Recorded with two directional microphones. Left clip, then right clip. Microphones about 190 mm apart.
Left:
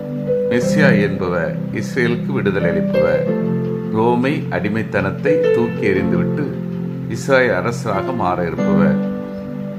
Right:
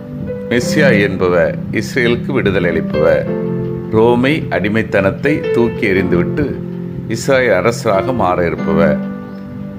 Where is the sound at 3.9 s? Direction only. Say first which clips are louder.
Right 6 dB; 25° right (ahead or behind).